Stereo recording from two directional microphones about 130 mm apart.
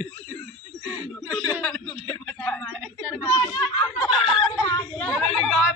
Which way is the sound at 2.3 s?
20° left (ahead or behind).